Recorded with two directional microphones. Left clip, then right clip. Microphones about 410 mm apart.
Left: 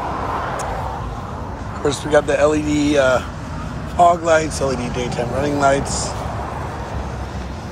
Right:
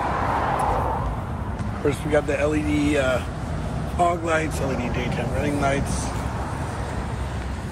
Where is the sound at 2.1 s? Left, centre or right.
Centre.